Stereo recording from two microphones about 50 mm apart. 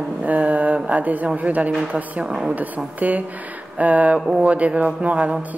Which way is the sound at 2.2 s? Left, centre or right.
Centre.